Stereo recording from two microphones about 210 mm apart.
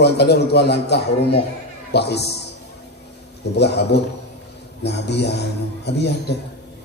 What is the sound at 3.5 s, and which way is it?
A man's voice, 50° left (ahead or behind).